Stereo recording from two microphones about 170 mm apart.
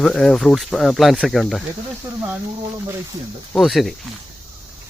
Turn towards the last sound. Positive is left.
turn(degrees=0)  # may be behind; listen again after turning